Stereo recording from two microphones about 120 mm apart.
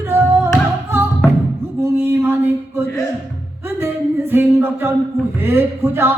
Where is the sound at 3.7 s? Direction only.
20° right (ahead or behind).